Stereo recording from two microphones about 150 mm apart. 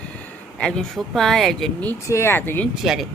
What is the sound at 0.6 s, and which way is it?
Speech, 5° left (ahead or behind).